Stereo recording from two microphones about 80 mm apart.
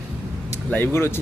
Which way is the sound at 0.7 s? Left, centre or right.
Left.